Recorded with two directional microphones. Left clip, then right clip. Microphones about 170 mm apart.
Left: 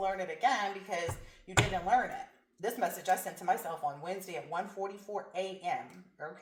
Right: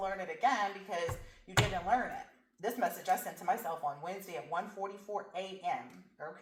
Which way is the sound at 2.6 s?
25° left (ahead or behind).